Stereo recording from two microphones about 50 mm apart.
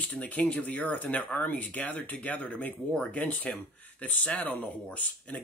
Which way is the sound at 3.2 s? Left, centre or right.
Left.